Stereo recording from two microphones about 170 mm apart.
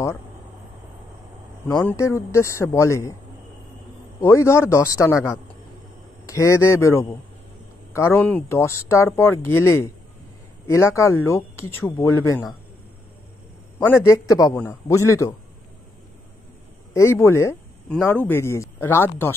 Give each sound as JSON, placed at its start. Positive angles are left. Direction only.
{"t": 1.7, "sound": "speech", "side_deg": 15}
{"t": 4.2, "sound": "speech", "side_deg": 15}
{"t": 13.7, "sound": "speech", "side_deg": 15}
{"t": 16.9, "sound": "speech", "side_deg": 15}